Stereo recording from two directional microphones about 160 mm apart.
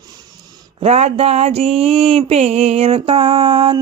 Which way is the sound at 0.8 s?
40° right (ahead or behind).